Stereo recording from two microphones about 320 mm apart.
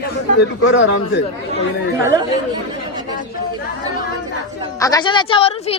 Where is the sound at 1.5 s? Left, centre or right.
Centre.